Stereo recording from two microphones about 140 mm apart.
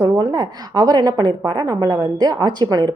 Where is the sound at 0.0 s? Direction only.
25° right (ahead or behind).